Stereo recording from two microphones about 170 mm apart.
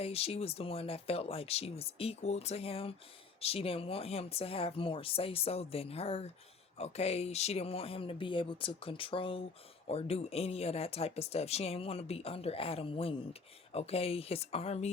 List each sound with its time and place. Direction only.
0.0 s speech: 35° left (ahead or behind)